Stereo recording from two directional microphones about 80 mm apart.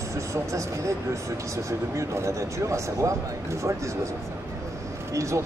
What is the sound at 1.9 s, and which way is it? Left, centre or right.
Speech, right.